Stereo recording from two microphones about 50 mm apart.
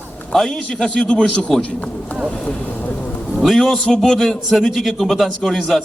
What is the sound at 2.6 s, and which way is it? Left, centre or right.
Speech, left.